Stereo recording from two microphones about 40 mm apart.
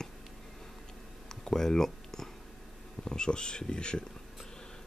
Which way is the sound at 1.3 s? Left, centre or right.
Centre.